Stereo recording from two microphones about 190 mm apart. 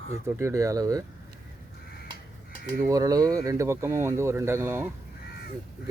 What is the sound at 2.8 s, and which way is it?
Speech, 15° right (ahead or behind).